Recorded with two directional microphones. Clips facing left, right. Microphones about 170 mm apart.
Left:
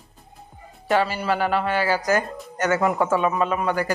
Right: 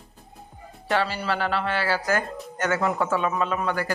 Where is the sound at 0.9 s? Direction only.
10° left (ahead or behind).